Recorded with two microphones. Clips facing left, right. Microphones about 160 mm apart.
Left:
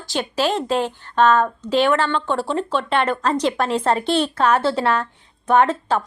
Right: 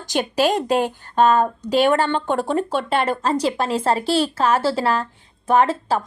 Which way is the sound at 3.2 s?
35° right (ahead or behind).